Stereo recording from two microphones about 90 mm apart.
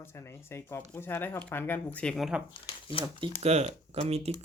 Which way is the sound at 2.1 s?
Centre (ahead or behind).